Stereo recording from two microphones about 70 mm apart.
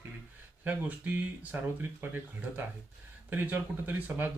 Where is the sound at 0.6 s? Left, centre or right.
Right.